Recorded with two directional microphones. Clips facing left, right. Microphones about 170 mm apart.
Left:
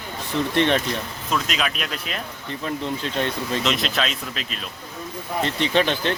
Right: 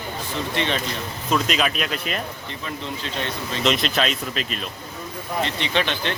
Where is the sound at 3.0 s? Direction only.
50° left (ahead or behind).